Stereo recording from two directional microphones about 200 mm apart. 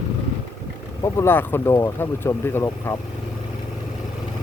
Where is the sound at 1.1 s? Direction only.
10° left (ahead or behind).